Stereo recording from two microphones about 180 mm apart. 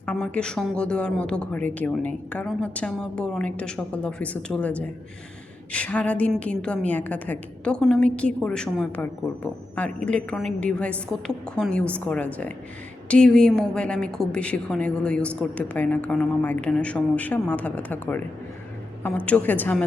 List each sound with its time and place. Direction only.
0.0 s a woman's voice: 5° left (ahead or behind)